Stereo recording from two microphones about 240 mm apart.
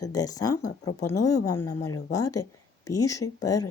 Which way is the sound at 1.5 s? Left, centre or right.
Centre.